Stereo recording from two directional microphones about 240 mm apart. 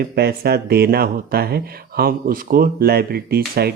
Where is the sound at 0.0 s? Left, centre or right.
Right.